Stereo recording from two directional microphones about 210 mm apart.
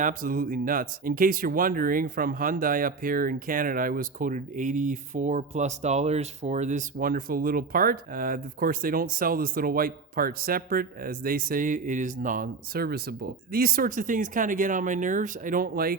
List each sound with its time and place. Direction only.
0.0 s speech: 40° right (ahead or behind)